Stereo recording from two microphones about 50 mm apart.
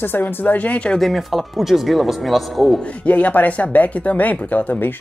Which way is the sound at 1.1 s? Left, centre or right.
Centre.